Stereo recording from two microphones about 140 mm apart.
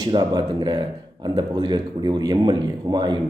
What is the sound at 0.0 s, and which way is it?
A man's voice, 30° right (ahead or behind).